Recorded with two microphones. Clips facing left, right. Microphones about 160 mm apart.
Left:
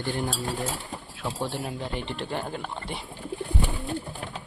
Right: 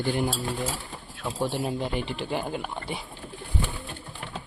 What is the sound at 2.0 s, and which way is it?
Speech, 5° right (ahead or behind).